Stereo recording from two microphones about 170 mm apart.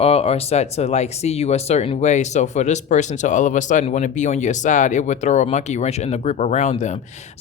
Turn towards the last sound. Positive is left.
turn(degrees=40)  # may be behind; listen again after turning